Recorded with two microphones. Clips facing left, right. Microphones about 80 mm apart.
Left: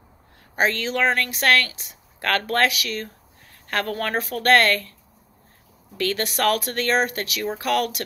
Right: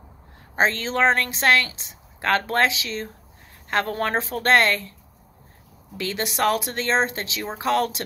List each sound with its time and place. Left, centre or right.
0.6 s a woman's voice: right
5.9 s a woman's voice: centre